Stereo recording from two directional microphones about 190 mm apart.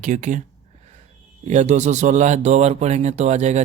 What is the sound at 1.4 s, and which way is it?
Speech, 35° right (ahead or behind).